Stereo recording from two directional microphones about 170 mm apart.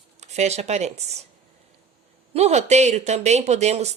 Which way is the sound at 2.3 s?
40° right (ahead or behind).